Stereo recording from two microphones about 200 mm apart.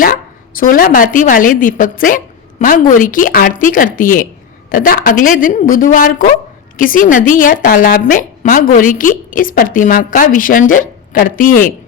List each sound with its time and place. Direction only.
0.0 s a woman's voice: 45° left (ahead or behind)